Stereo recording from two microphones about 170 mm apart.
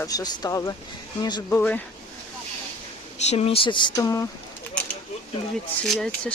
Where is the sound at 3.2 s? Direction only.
40° left (ahead or behind); by 4.3 s 20° left (ahead or behind).